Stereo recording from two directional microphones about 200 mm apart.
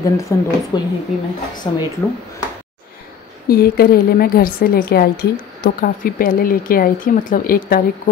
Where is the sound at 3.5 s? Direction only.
50° left (ahead or behind).